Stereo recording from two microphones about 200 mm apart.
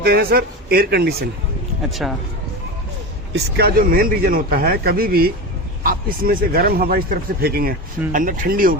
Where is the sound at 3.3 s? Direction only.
50° right (ahead or behind).